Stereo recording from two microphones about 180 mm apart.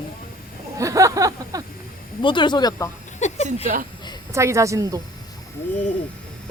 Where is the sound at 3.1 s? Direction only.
40° left (ahead or behind).